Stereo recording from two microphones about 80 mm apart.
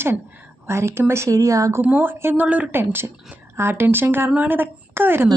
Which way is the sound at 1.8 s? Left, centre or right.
Right.